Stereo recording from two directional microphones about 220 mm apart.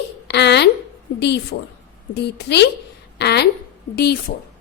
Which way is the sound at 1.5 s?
50° left (ahead or behind).